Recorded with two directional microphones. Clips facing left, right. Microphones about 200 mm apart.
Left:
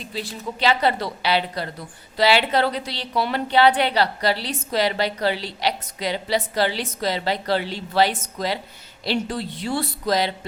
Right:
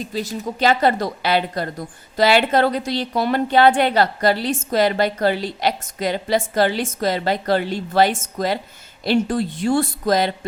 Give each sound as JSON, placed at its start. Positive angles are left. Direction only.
{"t": 0.0, "sound": "a woman's voice", "side_deg": -45}